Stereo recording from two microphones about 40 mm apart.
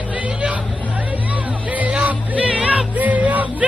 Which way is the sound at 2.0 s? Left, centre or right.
Right.